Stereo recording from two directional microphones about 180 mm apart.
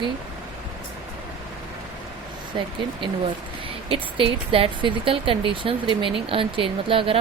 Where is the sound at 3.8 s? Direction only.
30° right (ahead or behind).